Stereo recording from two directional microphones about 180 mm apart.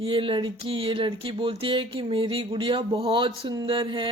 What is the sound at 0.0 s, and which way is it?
Speech, 30° right (ahead or behind).